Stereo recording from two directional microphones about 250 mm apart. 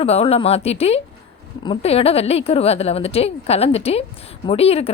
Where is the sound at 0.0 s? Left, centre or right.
Left.